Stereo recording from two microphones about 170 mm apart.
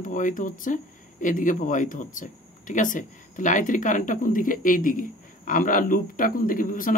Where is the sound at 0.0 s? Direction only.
50° left (ahead or behind).